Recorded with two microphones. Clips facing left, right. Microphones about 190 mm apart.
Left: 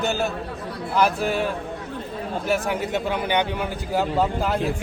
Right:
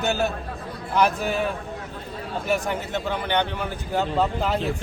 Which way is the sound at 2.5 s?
10° left (ahead or behind).